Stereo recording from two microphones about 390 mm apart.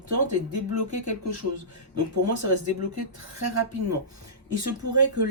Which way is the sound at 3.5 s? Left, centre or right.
Right.